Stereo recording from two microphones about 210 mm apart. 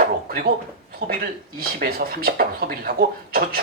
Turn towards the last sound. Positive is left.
turn(degrees=-45)  # may be behind; listen again after turning